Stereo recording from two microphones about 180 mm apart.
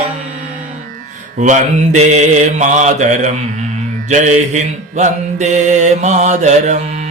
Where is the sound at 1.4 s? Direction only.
40° right (ahead or behind).